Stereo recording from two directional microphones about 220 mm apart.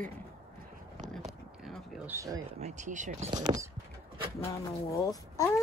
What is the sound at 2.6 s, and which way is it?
Speech, 30° right (ahead or behind).